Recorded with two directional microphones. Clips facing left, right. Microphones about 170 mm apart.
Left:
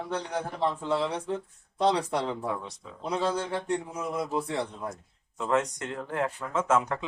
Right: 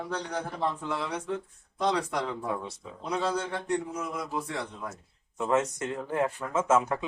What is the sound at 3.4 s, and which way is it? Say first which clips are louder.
A man's voice: even; 30° left (ahead or behind).